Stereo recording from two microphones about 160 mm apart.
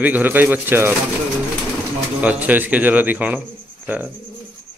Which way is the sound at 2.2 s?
10° right (ahead or behind).